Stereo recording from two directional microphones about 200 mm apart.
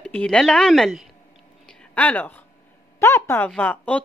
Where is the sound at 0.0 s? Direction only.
5° left (ahead or behind).